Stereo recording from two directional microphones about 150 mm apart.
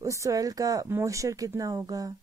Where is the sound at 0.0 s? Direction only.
20° right (ahead or behind).